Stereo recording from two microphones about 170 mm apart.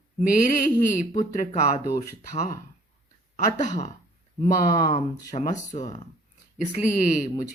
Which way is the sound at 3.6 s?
45° left (ahead or behind).